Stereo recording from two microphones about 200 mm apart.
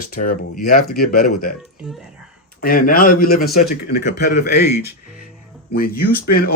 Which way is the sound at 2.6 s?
45° left (ahead or behind).